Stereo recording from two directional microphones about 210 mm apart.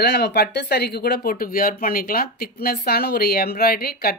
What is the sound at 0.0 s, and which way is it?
Speech, 50° left (ahead or behind).